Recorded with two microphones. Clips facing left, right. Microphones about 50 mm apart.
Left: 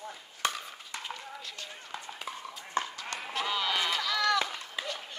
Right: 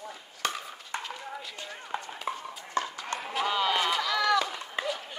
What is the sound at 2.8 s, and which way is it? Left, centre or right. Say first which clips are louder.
Clip-clop: right 2 dB; left.